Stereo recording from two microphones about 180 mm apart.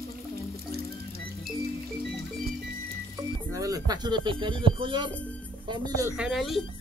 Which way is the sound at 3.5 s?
20° right (ahead or behind).